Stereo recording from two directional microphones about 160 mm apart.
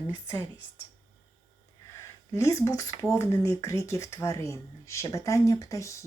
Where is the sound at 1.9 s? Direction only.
15° left (ahead or behind).